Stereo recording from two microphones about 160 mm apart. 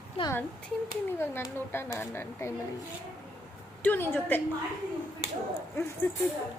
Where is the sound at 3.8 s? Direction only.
10° left (ahead or behind).